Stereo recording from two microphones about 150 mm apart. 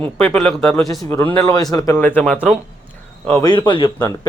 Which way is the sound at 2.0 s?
10° left (ahead or behind).